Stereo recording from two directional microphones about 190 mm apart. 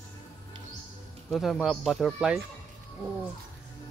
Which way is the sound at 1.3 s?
Centre (ahead or behind).